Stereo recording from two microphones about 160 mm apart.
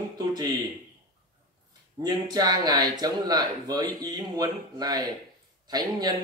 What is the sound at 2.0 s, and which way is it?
Speech, 25° right (ahead or behind).